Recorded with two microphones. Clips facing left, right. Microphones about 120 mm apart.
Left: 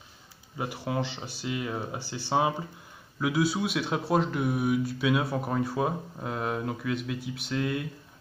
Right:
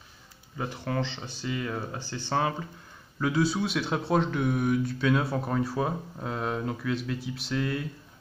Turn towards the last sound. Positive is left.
turn(degrees=0)  # may be behind; listen again after turning